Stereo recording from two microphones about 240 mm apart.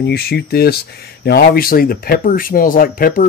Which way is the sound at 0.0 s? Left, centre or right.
Left.